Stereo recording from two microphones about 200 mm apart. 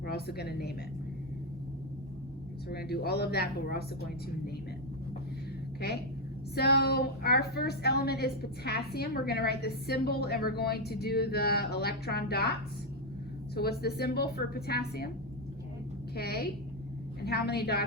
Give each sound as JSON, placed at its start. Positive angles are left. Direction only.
{"t": 0.0, "sound": "a woman's voice", "side_deg": 50}
{"t": 2.6, "sound": "a woman's voice", "side_deg": 50}
{"t": 6.5, "sound": "a woman's voice", "side_deg": 50}
{"t": 13.6, "sound": "a woman's voice", "side_deg": 50}
{"t": 16.1, "sound": "a woman's voice", "side_deg": 50}